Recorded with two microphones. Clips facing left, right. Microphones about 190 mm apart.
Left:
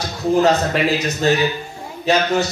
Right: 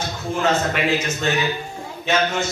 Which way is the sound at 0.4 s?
35° left (ahead or behind).